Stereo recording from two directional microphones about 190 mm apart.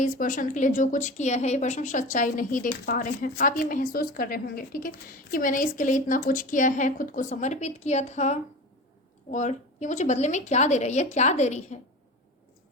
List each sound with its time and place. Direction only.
0.0 s a woman's voice: 45° left (ahead or behind)